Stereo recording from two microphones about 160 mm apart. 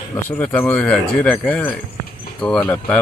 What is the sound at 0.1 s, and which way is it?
Speech, 10° left (ahead or behind).